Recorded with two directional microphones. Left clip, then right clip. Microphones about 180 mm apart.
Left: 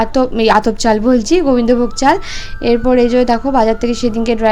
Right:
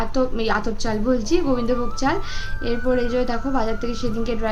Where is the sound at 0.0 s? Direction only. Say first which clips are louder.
Left 10 dB; 45° left (ahead or behind).